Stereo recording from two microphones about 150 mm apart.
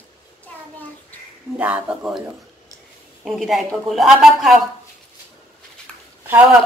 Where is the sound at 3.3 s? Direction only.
Centre (ahead or behind).